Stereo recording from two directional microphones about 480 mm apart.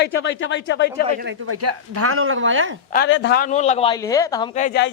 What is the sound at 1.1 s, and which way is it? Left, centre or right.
Speech, centre.